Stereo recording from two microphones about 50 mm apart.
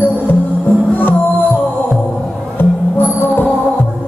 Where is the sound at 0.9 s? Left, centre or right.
Left.